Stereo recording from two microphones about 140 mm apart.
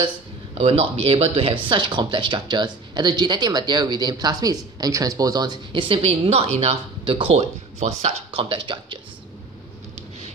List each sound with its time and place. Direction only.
0.6 s speech: 40° right (ahead or behind)